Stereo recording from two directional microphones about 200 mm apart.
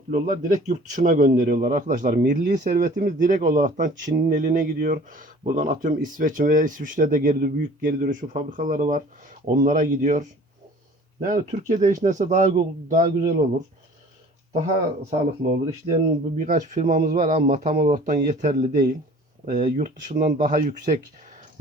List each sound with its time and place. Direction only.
0.1 s speech: 40° right (ahead or behind)
16.0 s speech: 35° right (ahead or behind)